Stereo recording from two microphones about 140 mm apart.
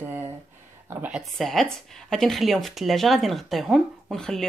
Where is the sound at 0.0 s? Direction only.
15° right (ahead or behind).